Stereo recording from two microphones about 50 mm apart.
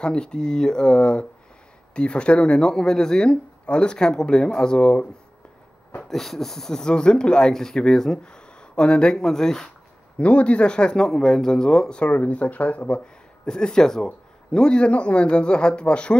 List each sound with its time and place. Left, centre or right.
0.0 s speech: centre
6.0 s speech: centre
9.2 s speech: centre
10.1 s speech: left
12.1 s a man's voice: left
13.5 s a man's voice: centre